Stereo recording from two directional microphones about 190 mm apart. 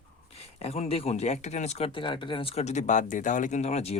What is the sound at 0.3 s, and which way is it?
Speech, 35° left (ahead or behind).